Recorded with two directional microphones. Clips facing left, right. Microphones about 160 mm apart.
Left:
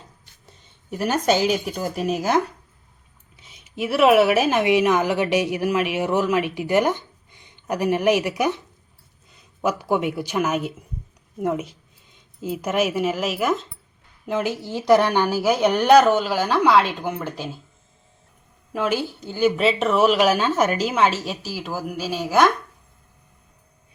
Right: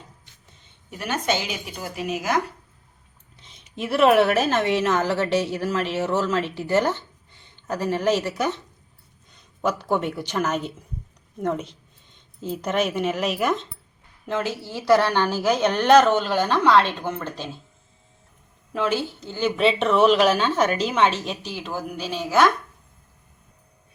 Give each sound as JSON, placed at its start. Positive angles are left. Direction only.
{"t": 0.9, "sound": "speech", "side_deg": 40}
{"t": 3.3, "sound": "a woman's voice", "side_deg": 10}
{"t": 14.3, "sound": "a woman's voice", "side_deg": 15}
{"t": 18.7, "sound": "a woman's voice", "side_deg": 10}